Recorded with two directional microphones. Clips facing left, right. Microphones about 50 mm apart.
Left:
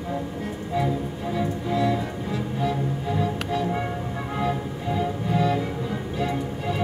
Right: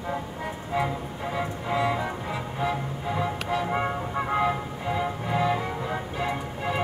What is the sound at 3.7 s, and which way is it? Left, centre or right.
Music, right.